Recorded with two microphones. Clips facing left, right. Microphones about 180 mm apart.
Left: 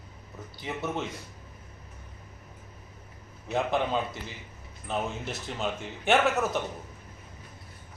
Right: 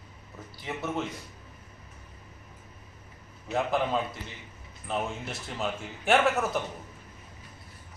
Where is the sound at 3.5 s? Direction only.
Centre (ahead or behind).